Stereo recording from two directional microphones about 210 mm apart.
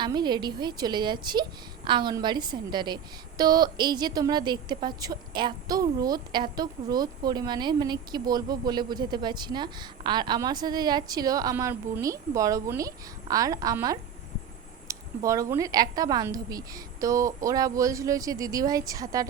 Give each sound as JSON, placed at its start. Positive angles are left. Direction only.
{"t": 0.0, "sound": "a woman's voice", "side_deg": -20}